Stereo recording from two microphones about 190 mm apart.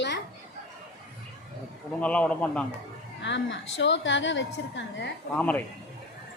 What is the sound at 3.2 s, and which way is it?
A woman's voice, 70° left (ahead or behind).